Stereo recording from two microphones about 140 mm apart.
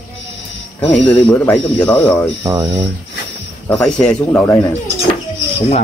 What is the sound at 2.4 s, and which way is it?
Speech, 25° right (ahead or behind).